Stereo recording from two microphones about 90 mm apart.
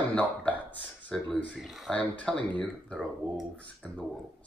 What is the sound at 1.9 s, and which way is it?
Speech, 15° left (ahead or behind).